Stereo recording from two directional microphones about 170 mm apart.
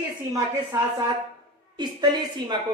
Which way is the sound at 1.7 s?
25° right (ahead or behind).